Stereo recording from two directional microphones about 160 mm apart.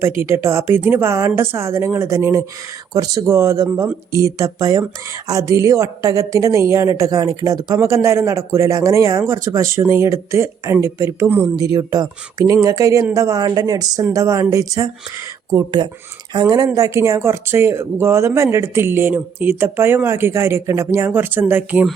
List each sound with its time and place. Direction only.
0.0 s a woman's voice: 15° right (ahead or behind)